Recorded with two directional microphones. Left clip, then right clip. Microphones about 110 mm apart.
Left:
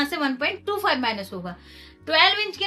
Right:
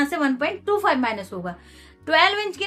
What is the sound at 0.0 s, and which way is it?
A woman's voice, 15° right (ahead or behind).